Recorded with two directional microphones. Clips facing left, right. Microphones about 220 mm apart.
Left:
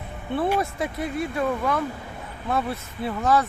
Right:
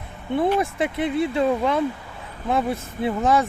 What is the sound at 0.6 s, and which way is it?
Speech, 25° right (ahead or behind).